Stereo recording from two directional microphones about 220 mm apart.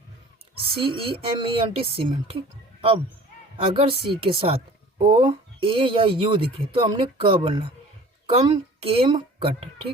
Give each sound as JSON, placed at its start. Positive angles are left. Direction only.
{"t": 0.8, "sound": "speech", "side_deg": -25}
{"t": 3.6, "sound": "speech", "side_deg": -25}